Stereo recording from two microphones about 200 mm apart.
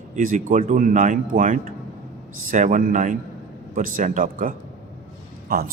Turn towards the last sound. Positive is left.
turn(degrees=-45)  # may be behind; listen again after turning